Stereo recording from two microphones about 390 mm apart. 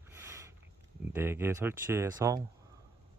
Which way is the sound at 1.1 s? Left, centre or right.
Centre.